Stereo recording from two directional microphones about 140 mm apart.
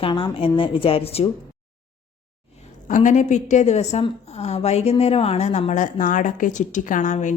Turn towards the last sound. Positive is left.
turn(degrees=60)  # may be behind; listen again after turning